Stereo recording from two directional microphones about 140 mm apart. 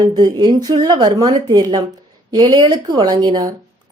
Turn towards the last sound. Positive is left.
turn(degrees=-30)  # may be behind; listen again after turning